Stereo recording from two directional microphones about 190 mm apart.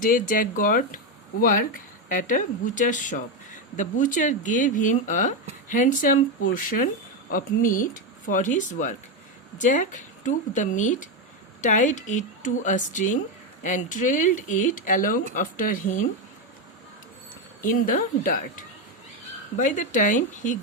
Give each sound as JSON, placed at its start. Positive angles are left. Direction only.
{"t": 0.0, "sound": "speech", "side_deg": 45}
{"t": 17.6, "sound": "speech", "side_deg": 45}